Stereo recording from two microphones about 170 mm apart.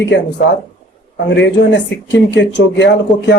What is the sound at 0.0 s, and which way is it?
Speech, 90° left.